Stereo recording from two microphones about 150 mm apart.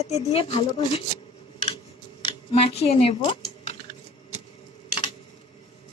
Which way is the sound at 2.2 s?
35° left (ahead or behind).